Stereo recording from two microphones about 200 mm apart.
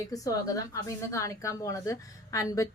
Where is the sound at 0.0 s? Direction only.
15° left (ahead or behind).